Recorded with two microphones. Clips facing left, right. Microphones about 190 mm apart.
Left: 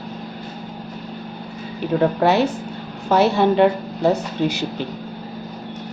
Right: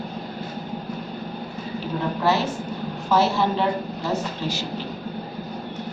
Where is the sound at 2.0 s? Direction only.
60° left (ahead or behind).